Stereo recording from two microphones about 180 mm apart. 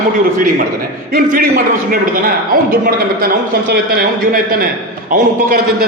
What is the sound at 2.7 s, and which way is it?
A man's voice, 55° right (ahead or behind).